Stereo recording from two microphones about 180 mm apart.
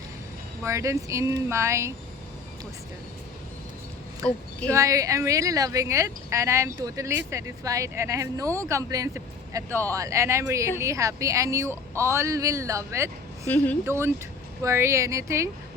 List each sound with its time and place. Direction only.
0.6 s speech: 15° right (ahead or behind)
4.7 s speech: 20° right (ahead or behind)